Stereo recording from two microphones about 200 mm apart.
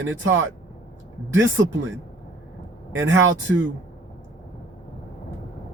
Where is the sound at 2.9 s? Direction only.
70° right (ahead or behind).